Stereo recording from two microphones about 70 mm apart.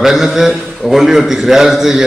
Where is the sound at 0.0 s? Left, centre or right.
Centre.